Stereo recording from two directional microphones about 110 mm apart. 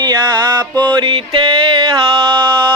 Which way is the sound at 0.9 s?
45° right (ahead or behind).